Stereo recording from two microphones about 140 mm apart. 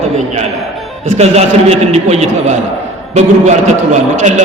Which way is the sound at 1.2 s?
50° right (ahead or behind).